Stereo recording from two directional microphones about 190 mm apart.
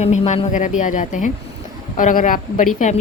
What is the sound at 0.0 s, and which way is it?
A woman's voice, 35° left (ahead or behind).